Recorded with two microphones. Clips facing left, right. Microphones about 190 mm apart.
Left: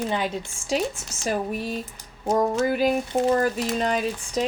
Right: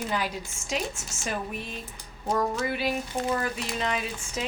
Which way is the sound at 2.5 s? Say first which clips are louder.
Left 7 dB; 45° left (ahead or behind).